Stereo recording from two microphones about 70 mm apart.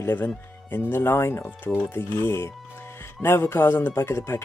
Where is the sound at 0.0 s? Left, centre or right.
Left.